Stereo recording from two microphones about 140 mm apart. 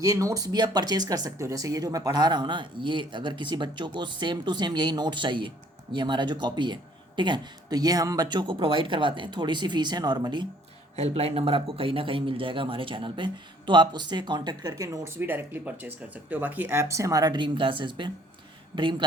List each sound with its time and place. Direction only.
0.0 s a man's voice: 20° right (ahead or behind)
10.9 s a man's voice: 50° right (ahead or behind)